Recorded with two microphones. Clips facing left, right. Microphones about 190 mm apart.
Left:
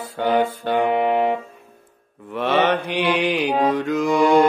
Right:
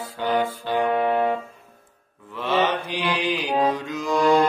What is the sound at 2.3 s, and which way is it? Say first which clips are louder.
Mantra: left 4 dB; 65° left (ahead or behind).